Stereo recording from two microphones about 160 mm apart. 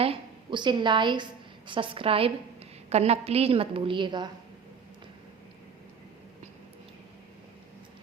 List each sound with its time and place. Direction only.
0.0 s a woman's voice: 35° right (ahead or behind)